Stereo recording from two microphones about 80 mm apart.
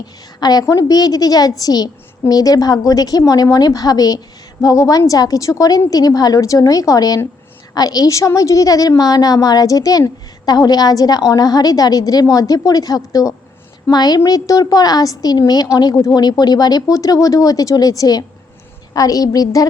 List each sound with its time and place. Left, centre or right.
0.3 s a woman's voice: left